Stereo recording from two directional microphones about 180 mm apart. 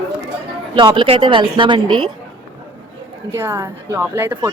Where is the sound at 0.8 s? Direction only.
25° right (ahead or behind).